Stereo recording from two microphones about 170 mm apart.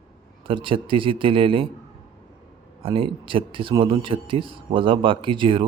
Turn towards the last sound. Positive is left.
turn(degrees=-30)  # may be behind; listen again after turning